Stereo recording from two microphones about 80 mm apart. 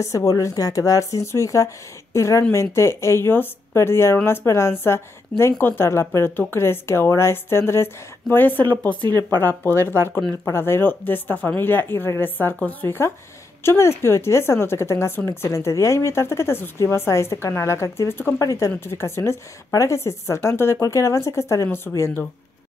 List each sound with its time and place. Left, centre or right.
0.0 s speech: left
9.0 s speech: right
9.4 s speech: left
18.4 s speech: left
18.9 s speech: left
21.6 s speech: left